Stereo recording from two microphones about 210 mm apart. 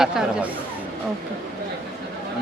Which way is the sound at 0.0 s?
5° right (ahead or behind).